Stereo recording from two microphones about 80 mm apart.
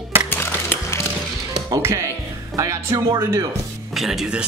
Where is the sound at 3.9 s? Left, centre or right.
Centre.